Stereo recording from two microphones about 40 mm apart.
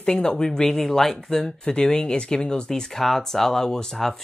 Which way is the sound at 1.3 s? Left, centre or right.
Centre.